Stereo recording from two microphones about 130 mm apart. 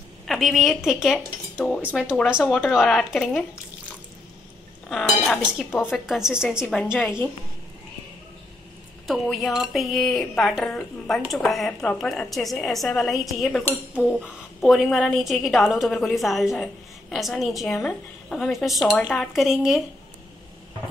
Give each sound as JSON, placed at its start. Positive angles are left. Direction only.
{"t": 0.3, "sound": "speech", "side_deg": 0}
{"t": 4.8, "sound": "speech", "side_deg": 0}
{"t": 7.0, "sound": "a woman's voice", "side_deg": 20}
{"t": 9.0, "sound": "speech", "side_deg": 0}